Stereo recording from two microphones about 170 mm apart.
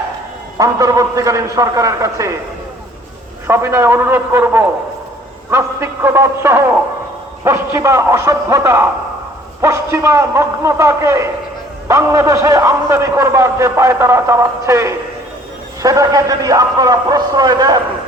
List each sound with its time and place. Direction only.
0.6 s a man's voice: 20° right (ahead or behind)
3.4 s a man's voice: 15° right (ahead or behind)